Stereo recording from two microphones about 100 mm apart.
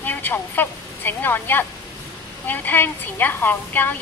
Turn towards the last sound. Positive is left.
turn(degrees=20)  # may be behind; listen again after turning